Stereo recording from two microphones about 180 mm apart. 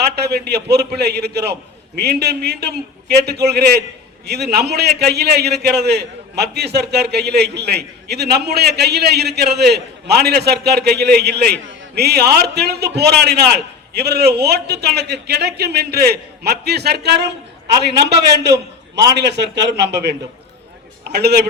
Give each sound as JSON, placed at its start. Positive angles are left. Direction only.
{"t": 0.2, "sound": "a man's voice", "side_deg": -65}